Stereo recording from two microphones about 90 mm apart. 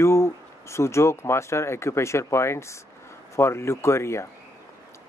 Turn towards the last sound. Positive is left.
turn(degrees=30)  # may be behind; listen again after turning